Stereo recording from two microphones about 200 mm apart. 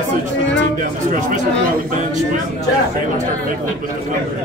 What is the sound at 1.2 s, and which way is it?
Speech, 40° right (ahead or behind).